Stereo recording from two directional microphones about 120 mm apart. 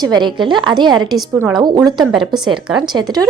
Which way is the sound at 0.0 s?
40° right (ahead or behind).